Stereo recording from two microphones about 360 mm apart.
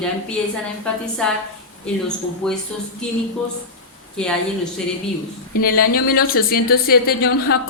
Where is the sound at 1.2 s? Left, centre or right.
Centre.